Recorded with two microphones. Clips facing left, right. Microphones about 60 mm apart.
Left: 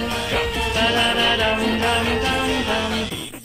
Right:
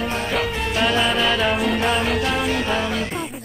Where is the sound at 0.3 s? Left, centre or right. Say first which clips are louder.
Even; centre.